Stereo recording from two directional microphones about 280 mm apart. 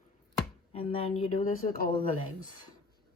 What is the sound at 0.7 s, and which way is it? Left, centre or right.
Speech, left.